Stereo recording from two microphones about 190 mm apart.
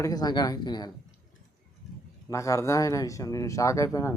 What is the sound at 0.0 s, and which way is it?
Speech, 20° left (ahead or behind).